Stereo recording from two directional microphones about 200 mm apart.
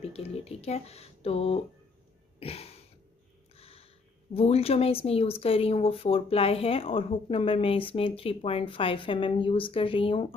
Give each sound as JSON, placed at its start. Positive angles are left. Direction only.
{"t": 0.1, "sound": "speech", "side_deg": 30}
{"t": 2.4, "sound": "a sound", "side_deg": 30}
{"t": 3.5, "sound": "speech", "side_deg": 30}